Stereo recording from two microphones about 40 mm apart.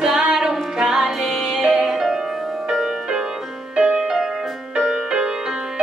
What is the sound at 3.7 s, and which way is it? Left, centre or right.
Music, right.